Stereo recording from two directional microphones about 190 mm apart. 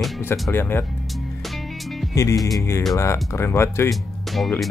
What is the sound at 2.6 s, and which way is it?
Speech, 15° left (ahead or behind).